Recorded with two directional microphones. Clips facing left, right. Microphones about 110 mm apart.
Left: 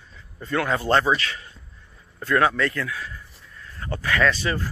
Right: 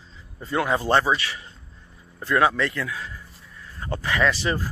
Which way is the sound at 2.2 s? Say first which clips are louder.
Even; 20° right (ahead or behind).